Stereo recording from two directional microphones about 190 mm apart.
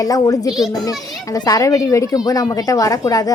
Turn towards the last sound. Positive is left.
turn(degrees=20)  # may be behind; listen again after turning